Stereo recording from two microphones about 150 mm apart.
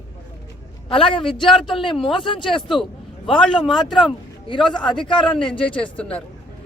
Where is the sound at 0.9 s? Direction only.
35° left (ahead or behind).